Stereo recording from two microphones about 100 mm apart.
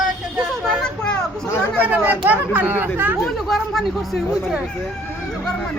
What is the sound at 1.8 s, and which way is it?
Speech, 15° right (ahead or behind).